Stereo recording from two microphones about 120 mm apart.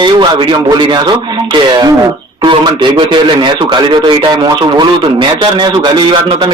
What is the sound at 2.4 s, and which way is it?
A man's voice, 40° right (ahead or behind).